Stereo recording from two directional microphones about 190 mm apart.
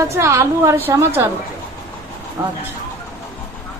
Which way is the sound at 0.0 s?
15° right (ahead or behind).